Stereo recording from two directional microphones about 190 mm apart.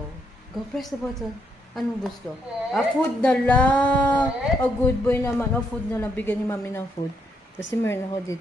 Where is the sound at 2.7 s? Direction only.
5° left (ahead or behind).